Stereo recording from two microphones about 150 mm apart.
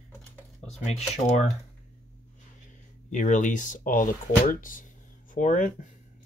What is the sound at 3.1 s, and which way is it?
Speech, 55° left (ahead or behind).